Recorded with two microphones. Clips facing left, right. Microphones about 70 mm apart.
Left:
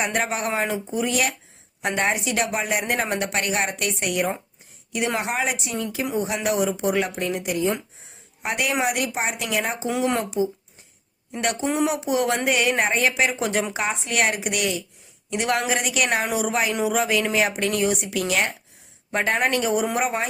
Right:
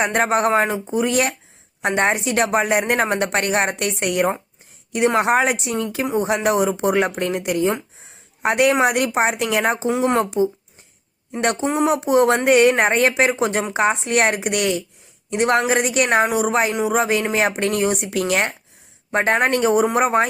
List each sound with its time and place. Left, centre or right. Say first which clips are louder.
0.0 s a woman's voice: right 7 dB; right
11.6 s speech: right 1 dB; right
11.9 s a woman's voice: right 7 dB; right
15.3 s speech: right 5 dB; right